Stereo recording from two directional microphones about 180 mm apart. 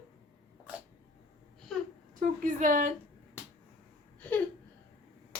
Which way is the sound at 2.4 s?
45° right (ahead or behind).